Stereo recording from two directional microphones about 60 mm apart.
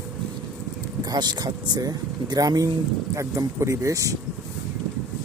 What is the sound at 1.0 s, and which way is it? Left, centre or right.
Speech, right.